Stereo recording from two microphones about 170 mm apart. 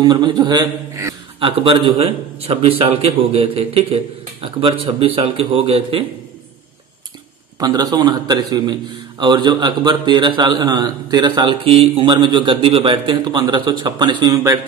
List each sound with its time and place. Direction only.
0.0 s a man's voice: 25° right (ahead or behind)
1.4 s a man's voice: 30° right (ahead or behind)
7.5 s a man's voice: 25° right (ahead or behind)